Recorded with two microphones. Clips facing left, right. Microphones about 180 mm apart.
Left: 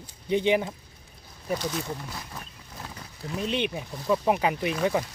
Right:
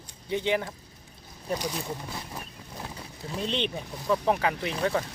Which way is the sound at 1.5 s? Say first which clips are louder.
Left 2 dB; 15° right (ahead or behind).